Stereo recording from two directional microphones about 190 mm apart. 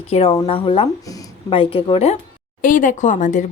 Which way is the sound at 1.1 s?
20° left (ahead or behind).